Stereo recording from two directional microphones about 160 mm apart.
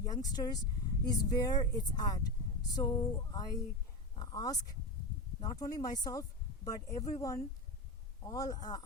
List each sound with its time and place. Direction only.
0.0 s speech: 25° left (ahead or behind)